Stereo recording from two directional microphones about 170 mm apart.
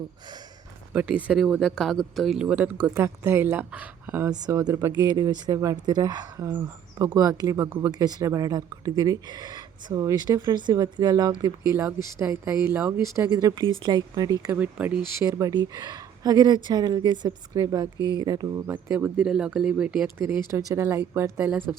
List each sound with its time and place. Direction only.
0.9 s speech: 5° right (ahead or behind)
15.2 s speech: 20° right (ahead or behind)